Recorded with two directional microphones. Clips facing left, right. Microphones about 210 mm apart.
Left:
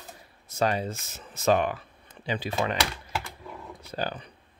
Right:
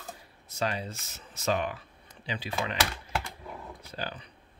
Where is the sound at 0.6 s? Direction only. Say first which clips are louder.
Left 6 dB; 50° left (ahead or behind).